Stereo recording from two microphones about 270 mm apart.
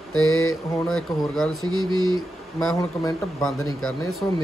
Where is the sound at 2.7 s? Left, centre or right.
Centre.